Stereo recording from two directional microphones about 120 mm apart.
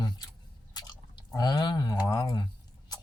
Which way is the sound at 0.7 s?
35° left (ahead or behind).